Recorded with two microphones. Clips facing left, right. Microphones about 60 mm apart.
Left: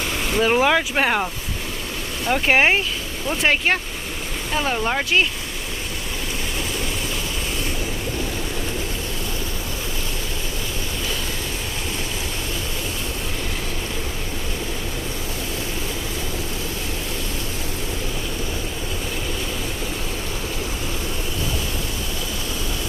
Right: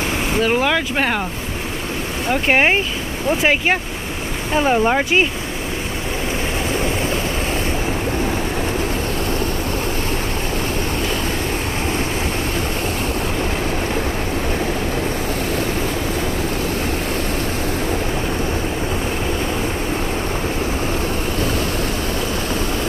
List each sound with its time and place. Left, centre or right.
0.4 s speech: centre
2.2 s speech: centre